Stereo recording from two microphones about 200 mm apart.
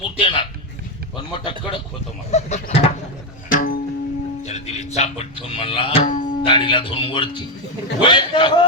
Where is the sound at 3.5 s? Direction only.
45° left (ahead or behind).